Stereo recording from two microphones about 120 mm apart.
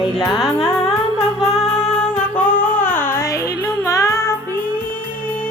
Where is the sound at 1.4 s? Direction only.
Centre (ahead or behind).